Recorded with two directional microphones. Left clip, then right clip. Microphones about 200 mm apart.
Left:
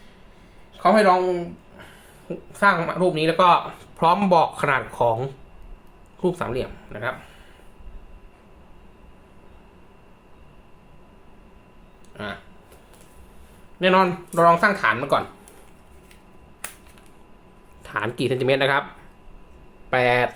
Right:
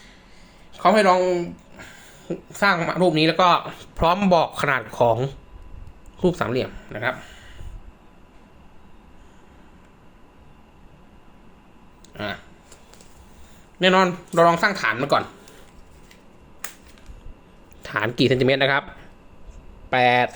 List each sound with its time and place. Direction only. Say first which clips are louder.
0.7 s speech: even; 35° right (ahead or behind)
12.1 s speech: right 3 dB; 30° right (ahead or behind)
13.7 s speech: right 1 dB; 25° right (ahead or behind)
17.8 s speech: right 4 dB; 25° right (ahead or behind)
19.9 s speech: right 2 dB; 30° right (ahead or behind)